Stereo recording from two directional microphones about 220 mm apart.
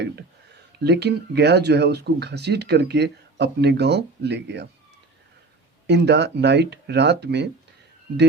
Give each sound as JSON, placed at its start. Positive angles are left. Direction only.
{"t": 0.8, "sound": "speech", "side_deg": -50}
{"t": 5.9, "sound": "speech", "side_deg": -50}